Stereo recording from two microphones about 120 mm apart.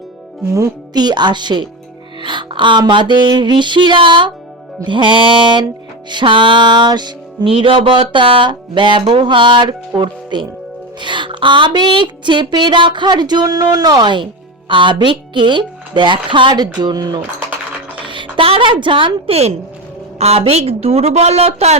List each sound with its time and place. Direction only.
0.5 s speech: 30° right (ahead or behind)
18.0 s a woman's voice: 45° right (ahead or behind); by 21.8 s 60° right (ahead or behind)